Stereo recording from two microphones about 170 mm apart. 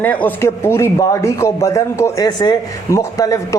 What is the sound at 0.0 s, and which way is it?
A man's voice, 10° left (ahead or behind).